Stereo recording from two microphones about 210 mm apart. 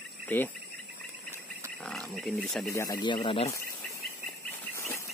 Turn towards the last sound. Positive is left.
turn(degrees=15)  # may be behind; listen again after turning